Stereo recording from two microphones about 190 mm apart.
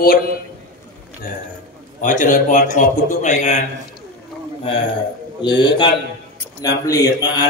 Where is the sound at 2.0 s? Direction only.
40° left (ahead or behind).